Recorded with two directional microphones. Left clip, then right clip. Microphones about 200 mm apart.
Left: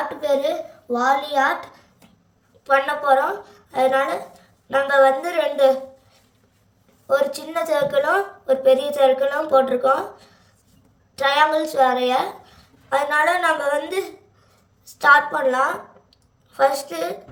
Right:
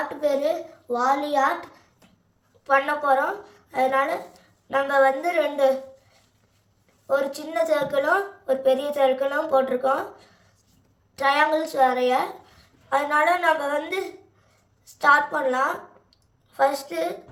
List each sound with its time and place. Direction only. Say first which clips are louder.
0.9 s a child's voice: left 3 dB; 5° left (ahead or behind)
2.6 s a woman's voice: left 3 dB; 10° left (ahead or behind)
7.1 s a woman's voice: left 4 dB; 10° left (ahead or behind)